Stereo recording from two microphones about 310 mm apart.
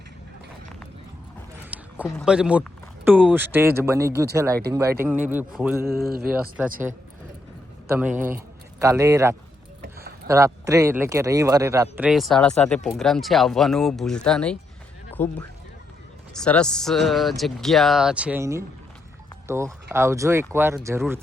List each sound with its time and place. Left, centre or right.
1.7 s a sound: centre
2.1 s speech: centre
5.9 s speech: right
6.3 s speech: centre